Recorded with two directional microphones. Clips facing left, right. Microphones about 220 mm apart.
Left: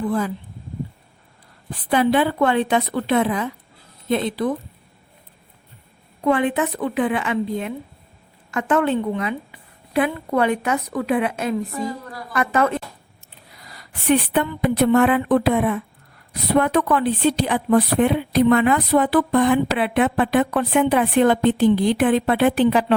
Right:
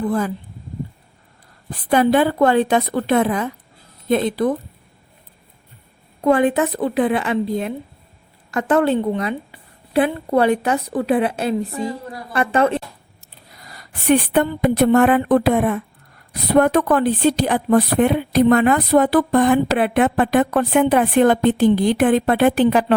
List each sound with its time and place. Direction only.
0.0 s a woman's voice: 45° right (ahead or behind)
1.9 s a woman's voice: 45° right (ahead or behind)
6.2 s a woman's voice: 40° right (ahead or behind)
13.6 s a sound: 45° right (ahead or behind)
14.6 s a woman's voice: 45° right (ahead or behind)